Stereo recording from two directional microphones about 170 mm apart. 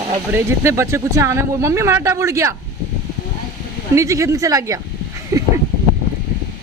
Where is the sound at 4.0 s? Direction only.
20° right (ahead or behind).